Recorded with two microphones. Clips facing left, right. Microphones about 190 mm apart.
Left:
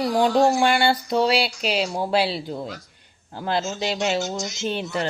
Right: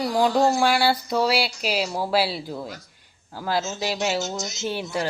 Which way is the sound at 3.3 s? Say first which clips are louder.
Left 1 dB; 25° left (ahead or behind).